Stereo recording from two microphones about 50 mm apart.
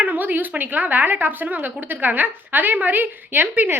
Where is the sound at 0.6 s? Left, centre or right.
Right.